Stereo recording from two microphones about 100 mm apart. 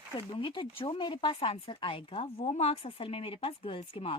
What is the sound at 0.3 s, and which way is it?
Speech, 55° left (ahead or behind).